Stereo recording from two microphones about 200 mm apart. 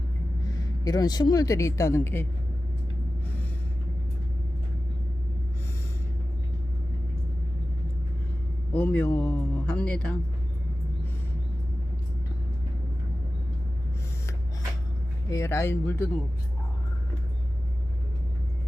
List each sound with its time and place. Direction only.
0.4 s speech: 20° left (ahead or behind)
8.7 s speech: 10° left (ahead or behind)
15.3 s speech: 15° left (ahead or behind)